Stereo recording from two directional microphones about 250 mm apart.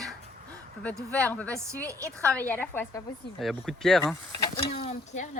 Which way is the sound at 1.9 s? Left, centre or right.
Centre.